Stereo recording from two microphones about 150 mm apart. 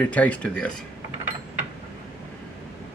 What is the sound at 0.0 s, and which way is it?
Speech, 10° left (ahead or behind).